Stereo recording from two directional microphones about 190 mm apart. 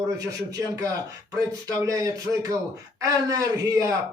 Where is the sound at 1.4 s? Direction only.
15° right (ahead or behind).